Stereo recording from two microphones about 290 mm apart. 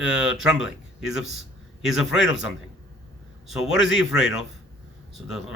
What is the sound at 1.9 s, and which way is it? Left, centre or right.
Speech, left.